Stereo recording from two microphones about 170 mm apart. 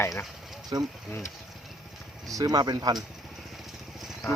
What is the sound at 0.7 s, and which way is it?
Speech, 25° right (ahead or behind).